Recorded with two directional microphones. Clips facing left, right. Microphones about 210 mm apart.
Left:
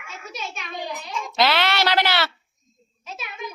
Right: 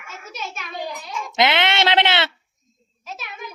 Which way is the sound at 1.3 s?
20° right (ahead or behind).